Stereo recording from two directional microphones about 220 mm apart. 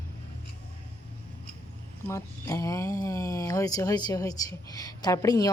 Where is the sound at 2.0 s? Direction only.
15° left (ahead or behind).